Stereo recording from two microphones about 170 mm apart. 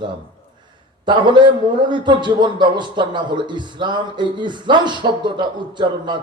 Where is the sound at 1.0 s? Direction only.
25° right (ahead or behind).